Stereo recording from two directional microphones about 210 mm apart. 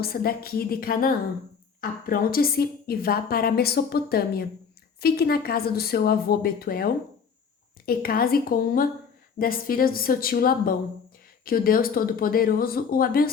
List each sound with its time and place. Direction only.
0.0 s a woman's voice: 45° left (ahead or behind)